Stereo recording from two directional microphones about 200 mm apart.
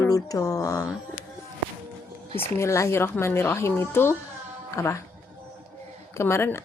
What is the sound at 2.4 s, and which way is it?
Speech, 15° left (ahead or behind).